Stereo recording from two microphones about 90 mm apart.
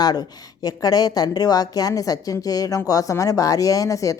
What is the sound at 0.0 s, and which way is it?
Speech, 45° left (ahead or behind).